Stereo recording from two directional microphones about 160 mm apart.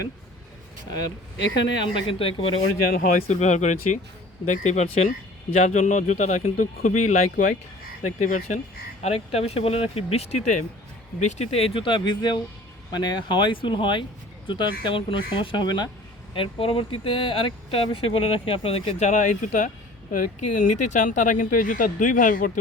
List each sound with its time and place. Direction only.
0.9 s speech: 25° left (ahead or behind)
1.9 s speech: 35° left (ahead or behind)
2.9 s speech: 60° left (ahead or behind)
3.2 s speech: 45° left (ahead or behind)